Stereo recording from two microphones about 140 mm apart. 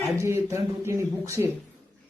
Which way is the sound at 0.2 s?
20° right (ahead or behind).